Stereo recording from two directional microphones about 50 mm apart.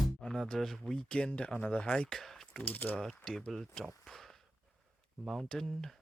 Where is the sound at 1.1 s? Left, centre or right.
Centre.